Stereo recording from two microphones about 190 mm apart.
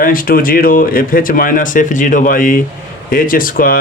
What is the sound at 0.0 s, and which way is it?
Speech, 45° left (ahead or behind).